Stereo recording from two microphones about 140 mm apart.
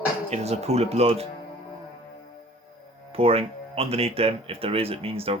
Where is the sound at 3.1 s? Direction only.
45° right (ahead or behind).